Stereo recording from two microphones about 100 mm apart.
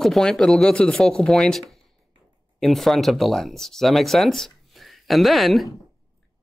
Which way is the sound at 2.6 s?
Centre (ahead or behind).